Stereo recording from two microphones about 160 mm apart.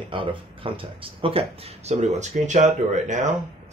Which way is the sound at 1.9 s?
45° right (ahead or behind).